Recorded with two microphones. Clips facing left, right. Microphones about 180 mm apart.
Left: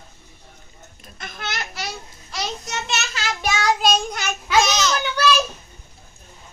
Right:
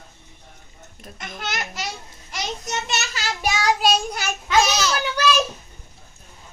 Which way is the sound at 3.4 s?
10° right (ahead or behind).